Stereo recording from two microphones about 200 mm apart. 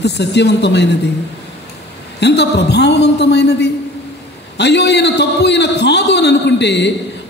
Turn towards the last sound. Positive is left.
turn(degrees=60)  # may be behind; listen again after turning